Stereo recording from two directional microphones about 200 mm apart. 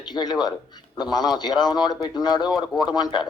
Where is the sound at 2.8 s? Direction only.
20° left (ahead or behind).